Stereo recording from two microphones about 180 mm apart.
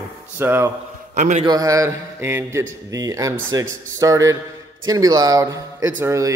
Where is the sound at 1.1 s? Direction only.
40° right (ahead or behind).